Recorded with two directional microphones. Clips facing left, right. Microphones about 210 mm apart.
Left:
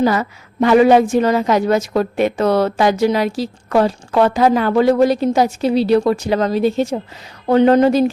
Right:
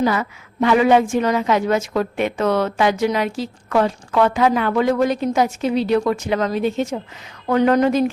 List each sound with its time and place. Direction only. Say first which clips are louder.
0.0 s a woman's voice: left 3 dB; 40° left (ahead or behind)